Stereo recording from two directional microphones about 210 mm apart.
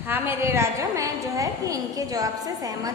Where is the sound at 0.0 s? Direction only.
10° right (ahead or behind).